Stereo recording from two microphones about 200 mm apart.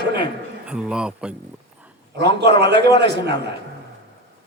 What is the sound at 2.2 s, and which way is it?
A man's voice, 55° right (ahead or behind).